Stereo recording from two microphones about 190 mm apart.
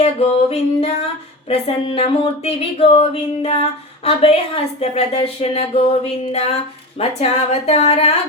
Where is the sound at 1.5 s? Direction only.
30° left (ahead or behind).